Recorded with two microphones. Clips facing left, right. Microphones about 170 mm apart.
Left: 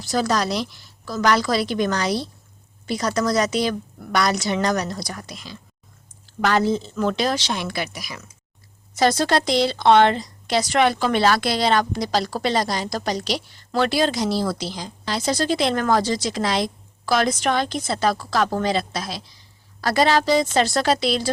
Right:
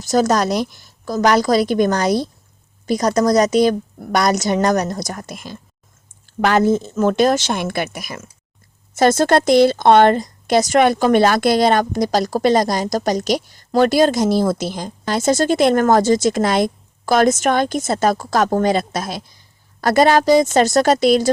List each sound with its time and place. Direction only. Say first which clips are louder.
0.0 s a woman's voice: right 6 dB; 45° right (ahead or behind)